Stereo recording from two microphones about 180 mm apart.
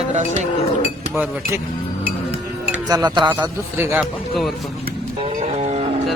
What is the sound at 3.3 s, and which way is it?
Speech, 10° right (ahead or behind).